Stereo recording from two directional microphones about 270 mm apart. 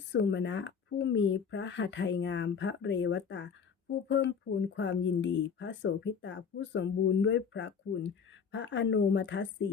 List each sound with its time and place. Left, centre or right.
0.1 s speech: left